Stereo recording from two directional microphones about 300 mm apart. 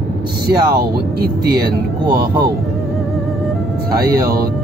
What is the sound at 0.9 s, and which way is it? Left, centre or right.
Speech, right.